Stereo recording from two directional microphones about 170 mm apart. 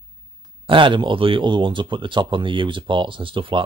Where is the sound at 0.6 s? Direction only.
30° right (ahead or behind).